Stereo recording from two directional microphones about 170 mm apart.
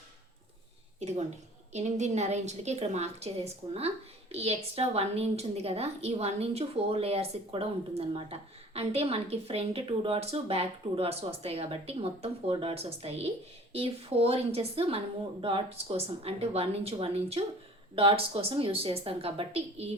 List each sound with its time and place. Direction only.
0.9 s a woman's voice: 40° right (ahead or behind)